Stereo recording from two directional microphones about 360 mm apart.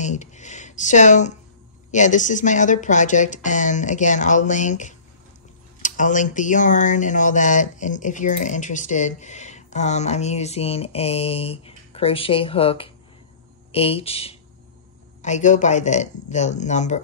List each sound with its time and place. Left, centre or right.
0.0 s speech: centre